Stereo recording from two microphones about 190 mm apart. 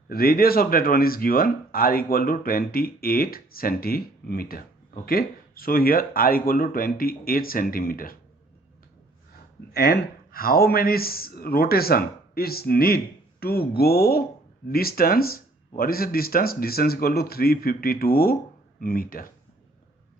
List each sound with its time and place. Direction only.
0.1 s speech: 50° left (ahead or behind)
9.7 s speech: 55° left (ahead or behind)